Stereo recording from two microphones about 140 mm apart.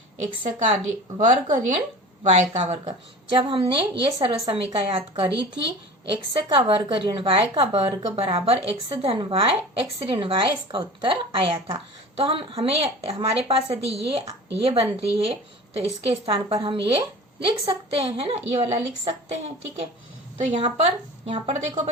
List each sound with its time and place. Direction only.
1.2 s a woman's voice: 65° right (ahead or behind)
2.2 s a woman's voice: 55° right (ahead or behind)
20.4 s a woman's voice: 45° right (ahead or behind)